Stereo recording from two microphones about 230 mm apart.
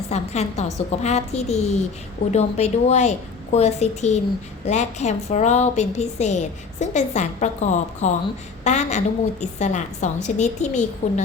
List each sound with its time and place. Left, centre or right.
0.1 s a woman's voice: left